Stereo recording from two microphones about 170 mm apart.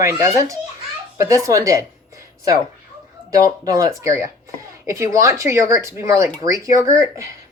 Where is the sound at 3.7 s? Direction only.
20° right (ahead or behind).